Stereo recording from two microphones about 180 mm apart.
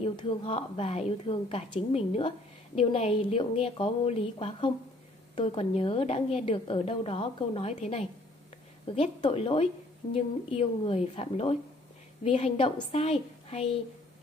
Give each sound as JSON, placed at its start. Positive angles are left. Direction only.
{"t": 0.0, "sound": "a woman's voice", "side_deg": 30}